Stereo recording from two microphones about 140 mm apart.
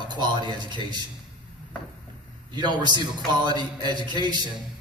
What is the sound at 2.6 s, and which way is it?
A man's voice, 35° right (ahead or behind).